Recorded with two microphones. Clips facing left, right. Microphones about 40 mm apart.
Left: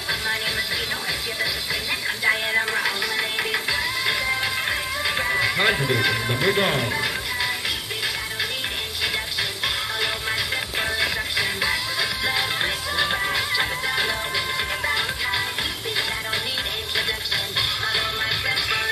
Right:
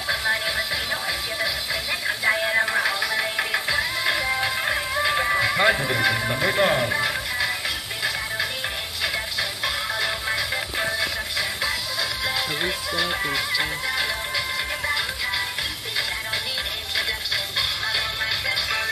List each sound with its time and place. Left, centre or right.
0.1 s music: centre
9.9 s music: centre
11.0 s music: left
17.6 s music: centre